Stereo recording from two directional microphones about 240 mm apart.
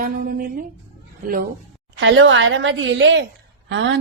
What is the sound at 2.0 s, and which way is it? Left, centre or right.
Speech, right.